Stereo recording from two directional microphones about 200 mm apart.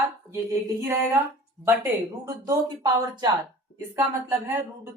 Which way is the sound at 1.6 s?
15° right (ahead or behind).